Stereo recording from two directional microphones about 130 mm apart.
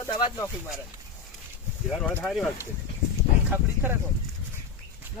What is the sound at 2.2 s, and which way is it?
Speech, centre (ahead or behind).